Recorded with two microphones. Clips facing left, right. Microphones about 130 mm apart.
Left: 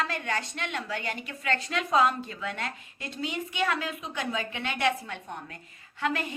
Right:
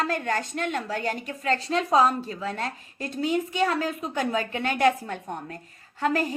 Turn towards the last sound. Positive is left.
turn(degrees=-40)  # may be behind; listen again after turning